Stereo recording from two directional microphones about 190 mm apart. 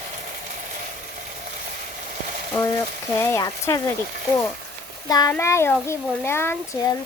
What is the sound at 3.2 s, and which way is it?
Speech, 15° left (ahead or behind).